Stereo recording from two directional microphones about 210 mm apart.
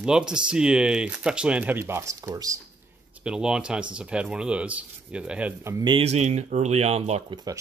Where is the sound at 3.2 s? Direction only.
5° right (ahead or behind); by 7.4 s 30° right (ahead or behind).